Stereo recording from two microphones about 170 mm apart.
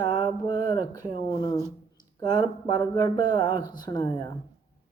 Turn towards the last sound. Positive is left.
turn(degrees=25)  # may be behind; listen again after turning